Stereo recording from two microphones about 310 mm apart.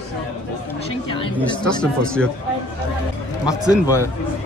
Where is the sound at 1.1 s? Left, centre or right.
Centre.